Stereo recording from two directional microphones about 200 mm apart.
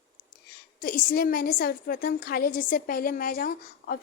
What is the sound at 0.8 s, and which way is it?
A child's voice, 50° left (ahead or behind).